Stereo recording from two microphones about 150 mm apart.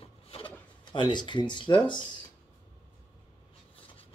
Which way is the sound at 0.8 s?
30° left (ahead or behind).